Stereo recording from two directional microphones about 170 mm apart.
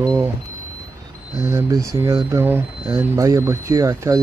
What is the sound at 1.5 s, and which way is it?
Speech, 15° right (ahead or behind).